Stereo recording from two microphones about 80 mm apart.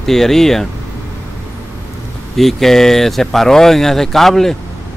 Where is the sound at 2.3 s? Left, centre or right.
Centre.